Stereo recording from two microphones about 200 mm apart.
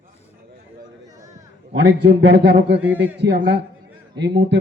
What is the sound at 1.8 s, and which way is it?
A man's voice, 55° right (ahead or behind).